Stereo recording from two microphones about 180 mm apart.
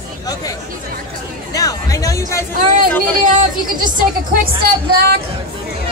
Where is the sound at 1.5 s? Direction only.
20° left (ahead or behind).